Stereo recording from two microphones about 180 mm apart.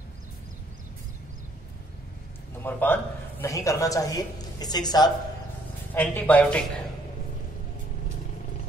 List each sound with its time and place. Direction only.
2.6 s a man's voice: 10° left (ahead or behind)
5.9 s speech: 10° left (ahead or behind)